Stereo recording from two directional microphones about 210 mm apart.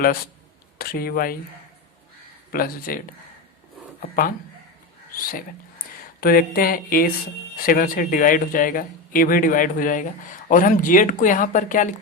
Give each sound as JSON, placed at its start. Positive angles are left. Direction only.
{"t": 0.8, "sound": "speech", "side_deg": 45}
{"t": 2.5, "sound": "speech", "side_deg": 45}
{"t": 4.0, "sound": "speech", "side_deg": 45}